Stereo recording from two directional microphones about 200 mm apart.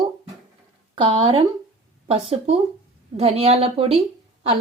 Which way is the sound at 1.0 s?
25° right (ahead or behind).